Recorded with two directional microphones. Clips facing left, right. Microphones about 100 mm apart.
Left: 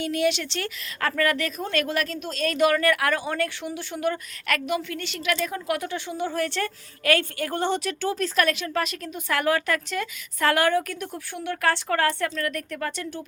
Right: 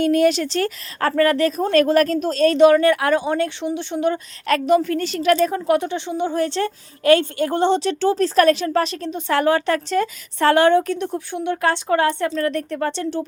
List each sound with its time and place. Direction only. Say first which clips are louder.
0.0 s a woman's voice: right 8 dB; 45° right (ahead or behind)